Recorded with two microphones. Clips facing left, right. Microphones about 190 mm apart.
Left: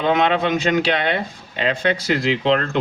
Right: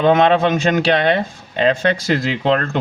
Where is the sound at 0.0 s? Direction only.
45° right (ahead or behind).